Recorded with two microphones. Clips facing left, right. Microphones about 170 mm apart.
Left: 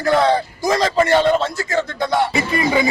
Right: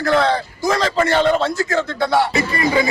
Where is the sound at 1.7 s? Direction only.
15° left (ahead or behind).